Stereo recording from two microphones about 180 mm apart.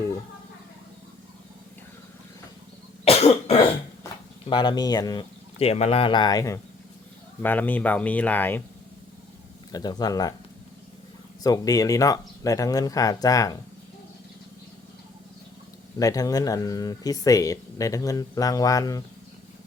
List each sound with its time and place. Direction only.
3.0 s cough: 35° left (ahead or behind)
4.4 s speech: 25° left (ahead or behind)
5.5 s speech: 35° left (ahead or behind); by 8.6 s 10° left (ahead or behind)
9.7 s speech: 20° left (ahead or behind)
11.4 s speech: 20° left (ahead or behind)
16.0 s speech: 20° left (ahead or behind)